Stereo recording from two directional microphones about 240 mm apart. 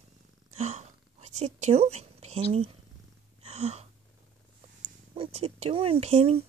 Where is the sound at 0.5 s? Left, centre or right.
Right.